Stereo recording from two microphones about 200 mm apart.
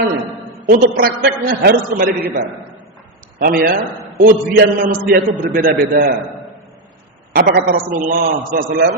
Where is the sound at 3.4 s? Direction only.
45° right (ahead or behind).